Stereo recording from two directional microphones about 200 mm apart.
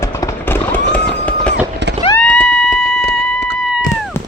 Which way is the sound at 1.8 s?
60° right (ahead or behind).